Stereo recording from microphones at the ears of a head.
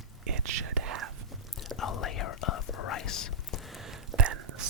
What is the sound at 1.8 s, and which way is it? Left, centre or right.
Whispering, left.